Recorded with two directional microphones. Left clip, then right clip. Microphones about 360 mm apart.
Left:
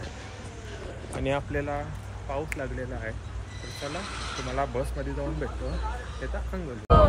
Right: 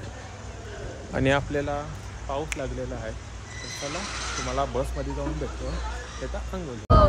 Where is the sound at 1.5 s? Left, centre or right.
Centre.